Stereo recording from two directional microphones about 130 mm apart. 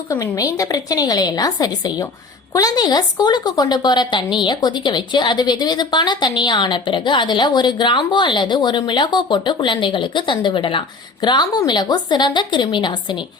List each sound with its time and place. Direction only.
0.1 s a woman's voice: 25° left (ahead or behind)